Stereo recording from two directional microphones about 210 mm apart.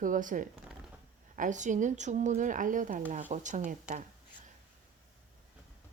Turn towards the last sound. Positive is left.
turn(degrees=-35)  # may be behind; listen again after turning